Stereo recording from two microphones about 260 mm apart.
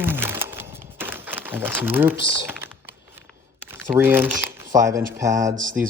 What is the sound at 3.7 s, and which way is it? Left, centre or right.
Speech, centre.